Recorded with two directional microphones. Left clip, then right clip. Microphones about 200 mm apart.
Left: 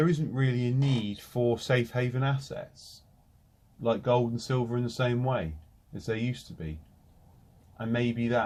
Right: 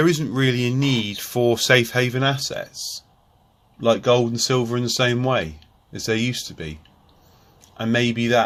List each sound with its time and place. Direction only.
0.0 s speech: 35° right (ahead or behind)
3.8 s speech: 35° right (ahead or behind)
7.8 s speech: 35° right (ahead or behind)